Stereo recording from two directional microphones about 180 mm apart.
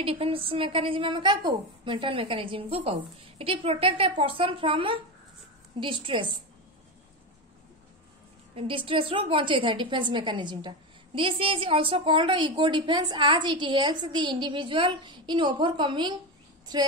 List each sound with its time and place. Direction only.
0.0 s a woman's voice: 30° right (ahead or behind)
8.5 s a woman's voice: 30° right (ahead or behind)